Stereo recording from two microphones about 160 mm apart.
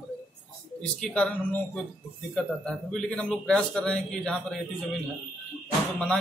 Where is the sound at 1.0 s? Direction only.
10° left (ahead or behind).